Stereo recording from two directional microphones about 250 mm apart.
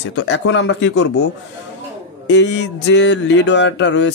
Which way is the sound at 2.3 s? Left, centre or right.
Left.